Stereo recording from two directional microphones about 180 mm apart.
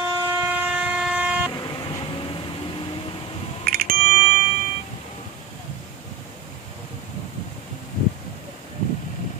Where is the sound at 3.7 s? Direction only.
55° right (ahead or behind).